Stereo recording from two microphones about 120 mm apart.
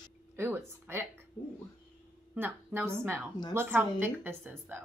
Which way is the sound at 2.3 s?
15° right (ahead or behind).